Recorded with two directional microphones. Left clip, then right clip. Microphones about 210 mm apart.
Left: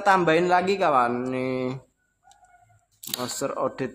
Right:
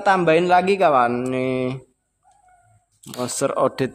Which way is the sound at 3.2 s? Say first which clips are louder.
Right 8 dB; 35° right (ahead or behind).